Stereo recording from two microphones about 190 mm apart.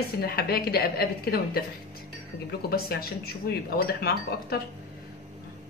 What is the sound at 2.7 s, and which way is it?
Speech, 55° left (ahead or behind).